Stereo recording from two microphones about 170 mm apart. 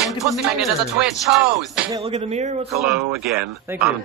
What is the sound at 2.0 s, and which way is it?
Speech, 35° right (ahead or behind).